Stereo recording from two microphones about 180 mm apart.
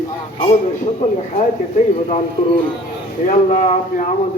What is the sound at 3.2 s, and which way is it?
Speech, 40° left (ahead or behind).